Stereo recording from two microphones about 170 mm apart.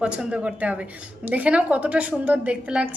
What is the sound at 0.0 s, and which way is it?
A woman's voice, 5° right (ahead or behind).